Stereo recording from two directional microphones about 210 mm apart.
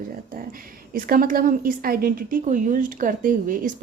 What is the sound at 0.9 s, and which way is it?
A woman's voice, 45° right (ahead or behind).